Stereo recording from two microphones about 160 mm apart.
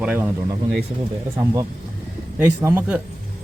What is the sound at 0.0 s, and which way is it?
Speech, 5° right (ahead or behind).